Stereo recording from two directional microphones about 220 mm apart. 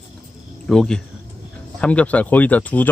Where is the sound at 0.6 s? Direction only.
5° left (ahead or behind).